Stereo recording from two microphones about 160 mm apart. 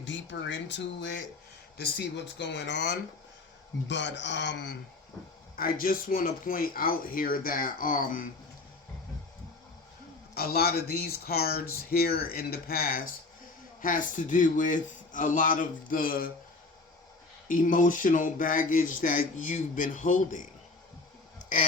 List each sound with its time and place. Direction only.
0.3 s speech: 90° left
5.5 s speech: 65° left (ahead or behind)
10.3 s speech: 75° left (ahead or behind)
17.5 s speech: 55° left (ahead or behind)